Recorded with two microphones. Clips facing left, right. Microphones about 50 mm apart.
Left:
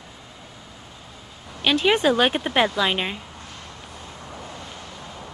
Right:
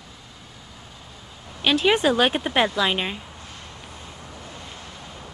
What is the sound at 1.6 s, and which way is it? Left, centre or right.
Speech, centre.